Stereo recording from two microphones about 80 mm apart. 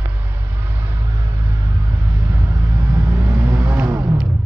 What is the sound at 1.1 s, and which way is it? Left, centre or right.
Music, right.